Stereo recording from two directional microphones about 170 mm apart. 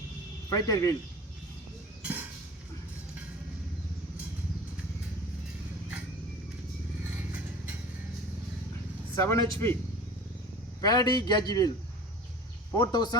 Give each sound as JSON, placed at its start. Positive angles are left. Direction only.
{"t": 0.5, "sound": "a man's voice", "side_deg": 20}
{"t": 2.0, "sound": "chink", "side_deg": -10}
{"t": 9.1, "sound": "a man's voice", "side_deg": 15}
{"t": 10.8, "sound": "a man's voice", "side_deg": 25}
{"t": 12.7, "sound": "a man's voice", "side_deg": 25}